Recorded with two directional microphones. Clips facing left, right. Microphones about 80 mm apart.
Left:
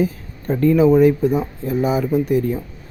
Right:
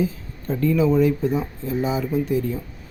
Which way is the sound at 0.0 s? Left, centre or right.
Left.